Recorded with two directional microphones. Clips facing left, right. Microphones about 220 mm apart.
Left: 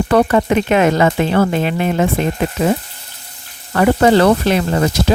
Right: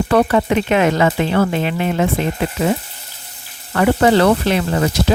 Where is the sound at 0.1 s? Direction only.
40° left (ahead or behind).